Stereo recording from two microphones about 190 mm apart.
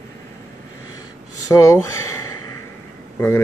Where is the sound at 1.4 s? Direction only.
15° left (ahead or behind).